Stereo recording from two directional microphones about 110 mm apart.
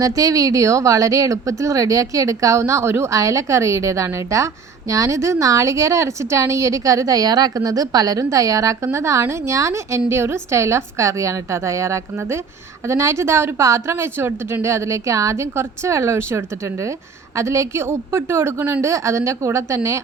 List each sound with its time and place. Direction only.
0.0 s speech: 30° right (ahead or behind)